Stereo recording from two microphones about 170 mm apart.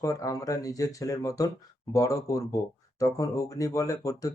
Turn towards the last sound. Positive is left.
turn(degrees=20)  # may be behind; listen again after turning